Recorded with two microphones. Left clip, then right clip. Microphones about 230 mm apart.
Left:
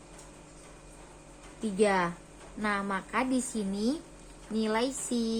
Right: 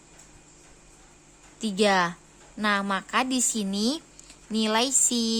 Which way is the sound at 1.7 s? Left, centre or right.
Right.